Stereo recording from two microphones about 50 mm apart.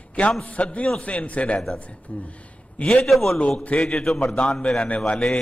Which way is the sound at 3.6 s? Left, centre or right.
Left.